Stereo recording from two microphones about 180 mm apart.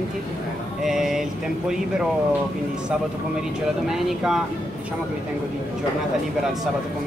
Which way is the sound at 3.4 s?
Centre (ahead or behind).